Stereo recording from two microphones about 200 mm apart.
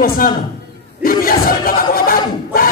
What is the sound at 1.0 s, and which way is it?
Battle cry, 45° left (ahead or behind).